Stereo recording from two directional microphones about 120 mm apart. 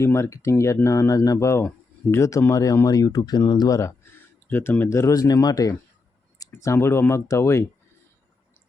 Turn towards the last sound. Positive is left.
turn(degrees=25)  # may be behind; listen again after turning